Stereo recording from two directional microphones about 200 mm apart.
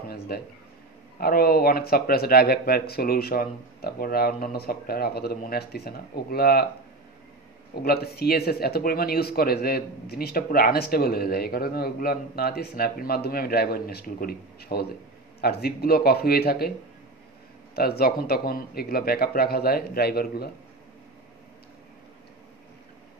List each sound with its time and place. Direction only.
0.3 s speech: 50° left (ahead or behind)
7.7 s speech: 50° left (ahead or behind)
17.7 s speech: 50° left (ahead or behind)